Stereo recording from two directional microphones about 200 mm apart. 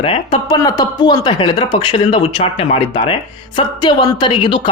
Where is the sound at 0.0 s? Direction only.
25° left (ahead or behind).